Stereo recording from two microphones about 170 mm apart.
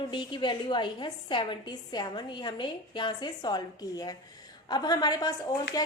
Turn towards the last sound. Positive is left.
turn(degrees=20)  # may be behind; listen again after turning